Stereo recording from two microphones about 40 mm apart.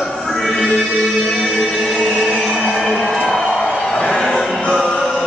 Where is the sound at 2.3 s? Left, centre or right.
Centre.